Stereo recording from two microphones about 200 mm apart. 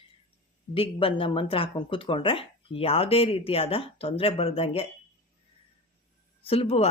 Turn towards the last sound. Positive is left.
turn(degrees=30)  # may be behind; listen again after turning